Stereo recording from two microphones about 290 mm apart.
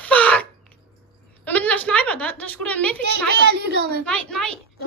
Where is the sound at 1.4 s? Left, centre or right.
Centre.